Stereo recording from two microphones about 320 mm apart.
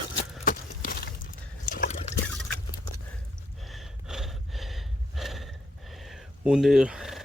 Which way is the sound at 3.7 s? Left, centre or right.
Centre.